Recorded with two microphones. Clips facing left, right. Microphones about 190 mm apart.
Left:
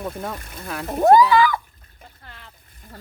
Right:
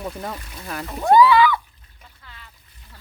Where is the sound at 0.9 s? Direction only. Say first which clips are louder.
Left 1 dB; 45° left (ahead or behind).